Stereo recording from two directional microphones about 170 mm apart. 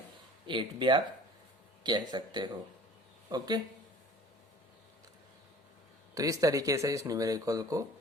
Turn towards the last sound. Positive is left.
turn(degrees=-20)  # may be behind; listen again after turning